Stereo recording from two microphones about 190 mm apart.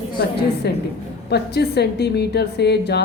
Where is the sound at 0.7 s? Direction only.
60° left (ahead or behind).